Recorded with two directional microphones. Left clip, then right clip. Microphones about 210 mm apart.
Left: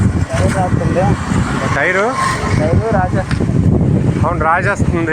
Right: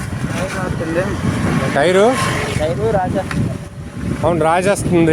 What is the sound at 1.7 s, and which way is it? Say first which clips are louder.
Speech: right 2 dB; 40° right (ahead or behind).